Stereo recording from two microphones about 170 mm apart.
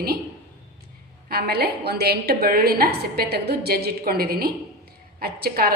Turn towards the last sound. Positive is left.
turn(degrees=-60)  # may be behind; listen again after turning